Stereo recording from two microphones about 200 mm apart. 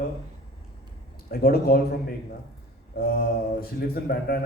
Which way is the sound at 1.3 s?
50° left (ahead or behind).